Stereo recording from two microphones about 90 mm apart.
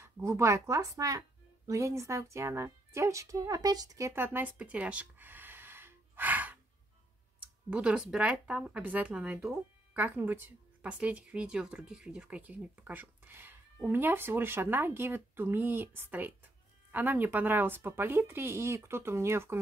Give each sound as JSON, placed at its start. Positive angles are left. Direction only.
{"t": 0.0, "sound": "a woman's voice", "side_deg": -30}
{"t": 4.1, "sound": "a sound", "side_deg": -25}
{"t": 7.7, "sound": "speech", "side_deg": -10}
{"t": 10.8, "sound": "speech", "side_deg": -15}